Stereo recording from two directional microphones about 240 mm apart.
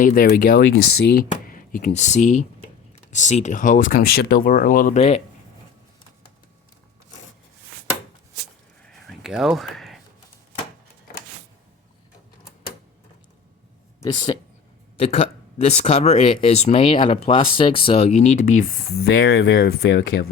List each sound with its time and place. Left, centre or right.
0.0 s speech: left
8.9 s a sound: centre
14.0 s speech: centre; by 20.3 s left